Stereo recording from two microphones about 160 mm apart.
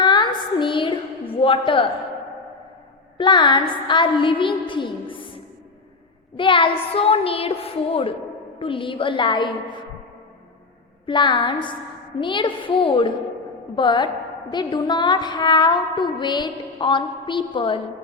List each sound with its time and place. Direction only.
0.0 s a sound: 30° left (ahead or behind)
1.4 s speech: 35° left (ahead or behind)
3.2 s a woman's voice: 30° left (ahead or behind)
6.3 s a woman's voice: 30° left (ahead or behind)
11.0 s a woman's voice: 30° left (ahead or behind)
13.7 s music: 30° left (ahead or behind)